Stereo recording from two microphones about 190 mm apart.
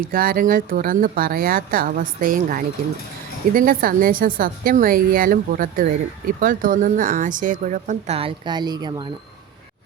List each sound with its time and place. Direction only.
0.0 s a woman's voice: 50° right (ahead or behind); by 9.0 s 20° right (ahead or behind)